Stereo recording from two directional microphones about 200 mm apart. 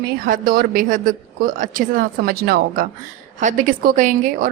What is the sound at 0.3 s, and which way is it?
A woman's voice, 45° right (ahead or behind).